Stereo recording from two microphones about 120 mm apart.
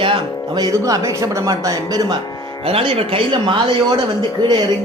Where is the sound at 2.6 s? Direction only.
50° right (ahead or behind).